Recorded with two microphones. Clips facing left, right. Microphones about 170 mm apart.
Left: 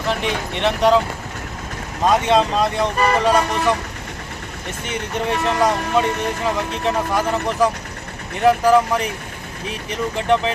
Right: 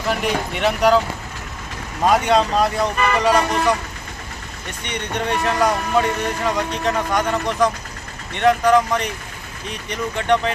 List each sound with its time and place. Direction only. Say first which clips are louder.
0.1 s speech: right 1 dB; 5° right (ahead or behind)
2.0 s speech: even; centre (ahead or behind)
2.9 s speech: left 2 dB; 35° left (ahead or behind)
3.2 s speech: even; centre (ahead or behind)
4.8 s speech: left 1 dB; 5° left (ahead or behind)